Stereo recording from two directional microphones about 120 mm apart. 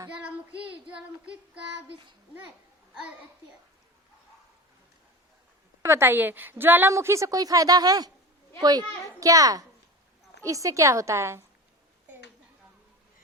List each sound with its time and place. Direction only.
0.9 s child singing: 10° right (ahead or behind)
5.8 s a woman's voice: 20° right (ahead or behind)
9.2 s a woman's voice: 30° right (ahead or behind)